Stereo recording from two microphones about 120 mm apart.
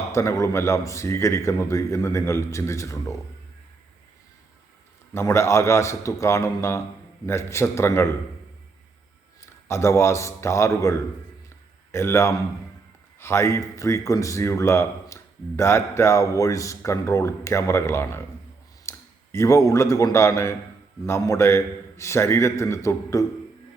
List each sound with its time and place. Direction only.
0.1 s speech: 25° left (ahead or behind)
5.1 s speech: 20° left (ahead or behind)
9.5 s a man's voice: 20° left (ahead or behind)